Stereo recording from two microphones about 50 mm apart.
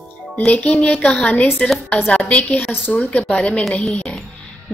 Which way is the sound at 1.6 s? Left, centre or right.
Centre.